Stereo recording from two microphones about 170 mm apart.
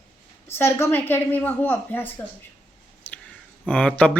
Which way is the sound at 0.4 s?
15° left (ahead or behind).